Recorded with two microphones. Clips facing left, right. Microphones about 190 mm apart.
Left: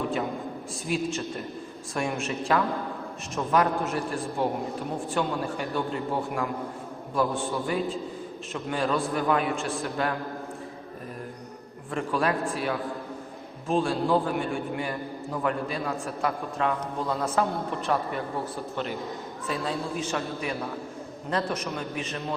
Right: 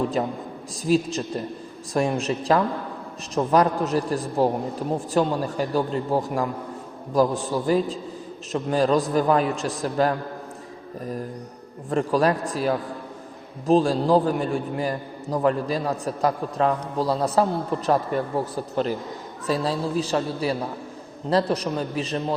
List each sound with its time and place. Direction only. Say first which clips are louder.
0.9 s a man's voice: right 7 dB; 35° right (ahead or behind)
11.9 s a man's voice: right 6 dB; 40° right (ahead or behind)